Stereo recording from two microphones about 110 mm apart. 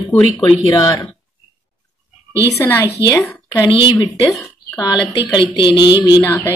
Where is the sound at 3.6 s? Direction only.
50° left (ahead or behind).